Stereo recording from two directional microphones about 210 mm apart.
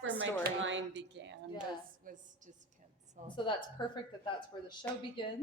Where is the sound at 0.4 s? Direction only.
60° right (ahead or behind).